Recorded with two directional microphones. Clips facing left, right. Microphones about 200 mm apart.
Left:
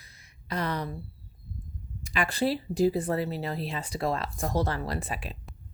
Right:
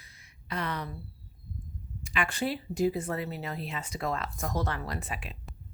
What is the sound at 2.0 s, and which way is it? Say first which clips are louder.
Speech: left 4 dB; 40° left (ahead or behind).